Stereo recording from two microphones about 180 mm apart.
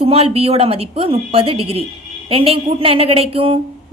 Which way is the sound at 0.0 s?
30° right (ahead or behind).